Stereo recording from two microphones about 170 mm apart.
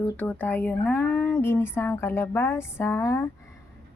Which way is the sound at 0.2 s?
10° left (ahead or behind).